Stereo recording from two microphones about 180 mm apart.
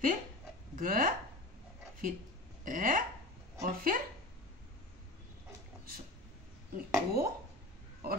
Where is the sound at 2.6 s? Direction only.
50° right (ahead or behind).